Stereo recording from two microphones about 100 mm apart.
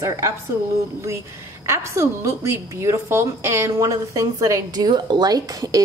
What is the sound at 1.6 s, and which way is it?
A woman's voice, 30° right (ahead or behind).